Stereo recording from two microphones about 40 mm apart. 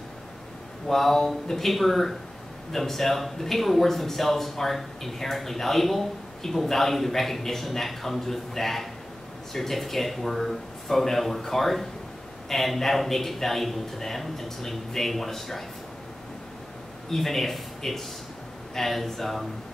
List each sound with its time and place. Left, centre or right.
0.8 s speech: centre
17.1 s speech: centre